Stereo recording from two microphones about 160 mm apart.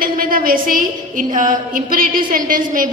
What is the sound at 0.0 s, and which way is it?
A woman's voice, 65° right (ahead or behind).